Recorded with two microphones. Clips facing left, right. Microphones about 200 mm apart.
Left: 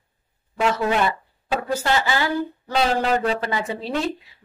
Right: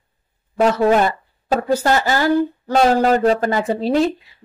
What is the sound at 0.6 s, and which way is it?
A woman's voice, 40° right (ahead or behind).